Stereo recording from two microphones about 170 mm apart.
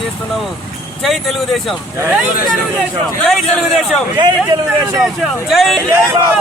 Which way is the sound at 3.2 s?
5° left (ahead or behind).